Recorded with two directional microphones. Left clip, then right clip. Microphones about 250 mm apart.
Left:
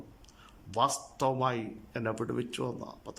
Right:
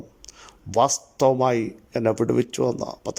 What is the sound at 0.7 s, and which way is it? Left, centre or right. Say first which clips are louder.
Speech: right 9 dB; right.